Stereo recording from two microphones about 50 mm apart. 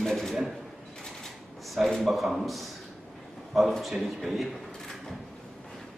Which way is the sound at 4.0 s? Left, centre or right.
Centre.